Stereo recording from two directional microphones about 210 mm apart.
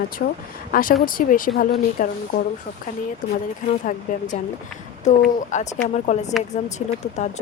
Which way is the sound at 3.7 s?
35° left (ahead or behind).